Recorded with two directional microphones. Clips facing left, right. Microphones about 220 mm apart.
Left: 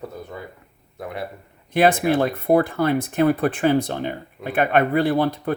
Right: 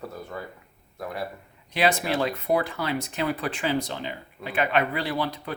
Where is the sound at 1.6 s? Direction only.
55° left (ahead or behind).